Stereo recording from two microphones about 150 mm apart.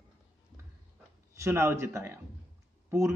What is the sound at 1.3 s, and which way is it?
Speech, 20° right (ahead or behind).